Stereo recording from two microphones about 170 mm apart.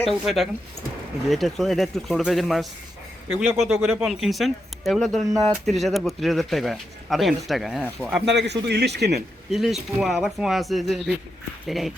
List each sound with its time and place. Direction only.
0.0 s speech: centre (ahead or behind)
8.2 s a man's voice: 85° right
9.5 s speech: centre (ahead or behind)